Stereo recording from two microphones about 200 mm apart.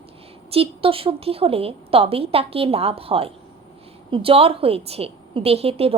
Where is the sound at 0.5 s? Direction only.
30° right (ahead or behind).